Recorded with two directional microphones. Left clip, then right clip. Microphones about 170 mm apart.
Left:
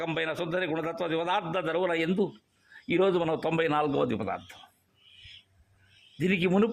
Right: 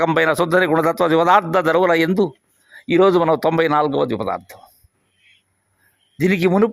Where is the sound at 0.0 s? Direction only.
50° right (ahead or behind); by 4.5 s 30° right (ahead or behind).